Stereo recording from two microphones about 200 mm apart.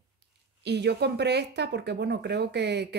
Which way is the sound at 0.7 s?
55° right (ahead or behind).